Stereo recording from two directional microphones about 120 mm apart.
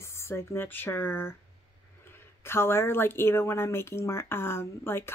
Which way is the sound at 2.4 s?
20° left (ahead or behind).